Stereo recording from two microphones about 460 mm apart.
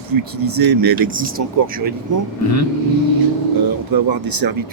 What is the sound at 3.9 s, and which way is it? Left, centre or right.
Speech, right.